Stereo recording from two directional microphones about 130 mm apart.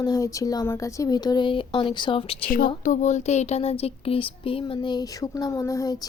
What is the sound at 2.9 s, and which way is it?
Speech, 65° left (ahead or behind).